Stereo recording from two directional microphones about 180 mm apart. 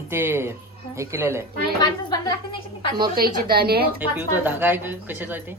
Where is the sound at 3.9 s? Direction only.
10° right (ahead or behind).